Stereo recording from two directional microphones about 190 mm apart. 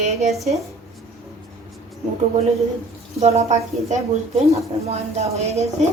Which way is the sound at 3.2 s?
35° right (ahead or behind).